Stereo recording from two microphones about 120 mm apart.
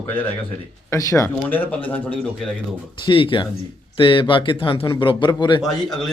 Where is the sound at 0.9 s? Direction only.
25° left (ahead or behind).